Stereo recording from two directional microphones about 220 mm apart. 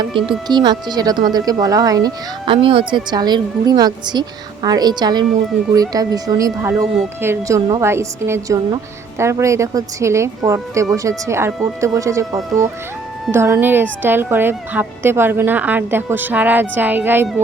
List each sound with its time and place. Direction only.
0.0 s speech: 20° right (ahead or behind)